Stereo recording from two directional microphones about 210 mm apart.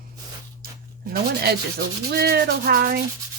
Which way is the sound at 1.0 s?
50° right (ahead or behind).